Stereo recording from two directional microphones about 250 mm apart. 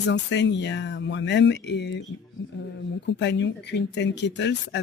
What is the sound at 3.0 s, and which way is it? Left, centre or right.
Speech, left.